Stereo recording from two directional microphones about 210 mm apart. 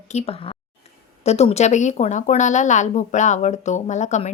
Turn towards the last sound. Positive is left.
turn(degrees=35)  # may be behind; listen again after turning